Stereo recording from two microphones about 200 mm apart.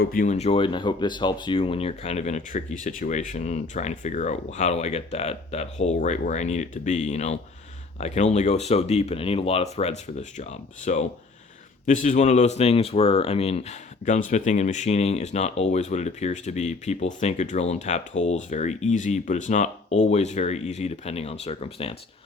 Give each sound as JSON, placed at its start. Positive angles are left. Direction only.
{"t": 0.0, "sound": "speech", "side_deg": 45}